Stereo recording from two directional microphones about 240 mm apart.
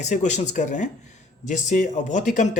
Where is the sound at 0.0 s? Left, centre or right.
Left.